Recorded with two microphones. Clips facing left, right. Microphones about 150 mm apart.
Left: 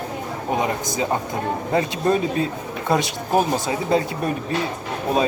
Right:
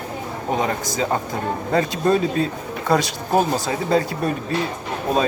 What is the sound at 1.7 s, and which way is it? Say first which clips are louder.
Speech: right 2 dB; 20° left (ahead or behind).